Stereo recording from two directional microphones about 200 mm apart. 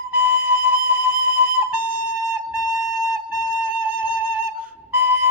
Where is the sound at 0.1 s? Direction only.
10° right (ahead or behind).